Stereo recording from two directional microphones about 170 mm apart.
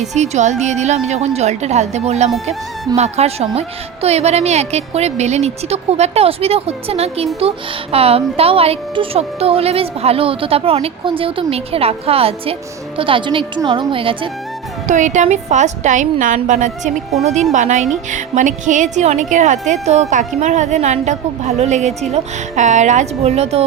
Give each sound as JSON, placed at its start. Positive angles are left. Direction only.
{"t": 0.0, "sound": "speech", "side_deg": -40}
{"t": 14.8, "sound": "speech", "side_deg": -45}